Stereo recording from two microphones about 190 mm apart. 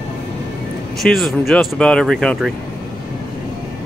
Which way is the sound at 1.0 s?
Centre (ahead or behind).